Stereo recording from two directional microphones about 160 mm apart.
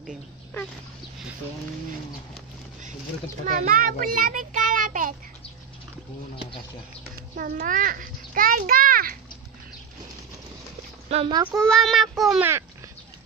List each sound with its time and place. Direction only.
3.4 s a child's voice: 55° right (ahead or behind)
7.3 s a child's voice: 65° right (ahead or behind)
11.1 s speech: 40° right (ahead or behind)
11.4 s speech: centre (ahead or behind)